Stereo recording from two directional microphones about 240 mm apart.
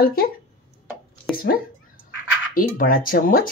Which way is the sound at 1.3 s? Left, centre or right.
Left.